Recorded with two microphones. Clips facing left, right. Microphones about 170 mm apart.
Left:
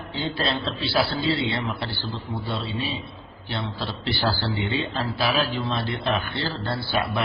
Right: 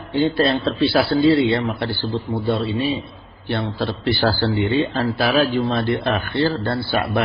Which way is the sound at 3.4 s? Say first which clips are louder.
Right 8 dB; 60° right (ahead or behind).